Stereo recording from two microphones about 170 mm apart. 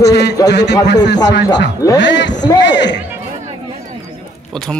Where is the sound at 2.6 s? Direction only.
90° left.